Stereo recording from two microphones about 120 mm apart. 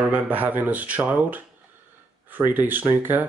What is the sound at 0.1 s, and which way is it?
Speech, 15° right (ahead or behind).